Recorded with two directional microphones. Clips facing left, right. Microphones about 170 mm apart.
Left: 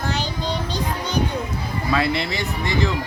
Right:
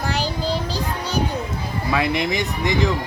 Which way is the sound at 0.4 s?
35° right (ahead or behind).